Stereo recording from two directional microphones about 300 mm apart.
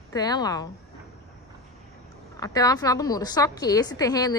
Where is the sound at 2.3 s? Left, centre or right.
Centre.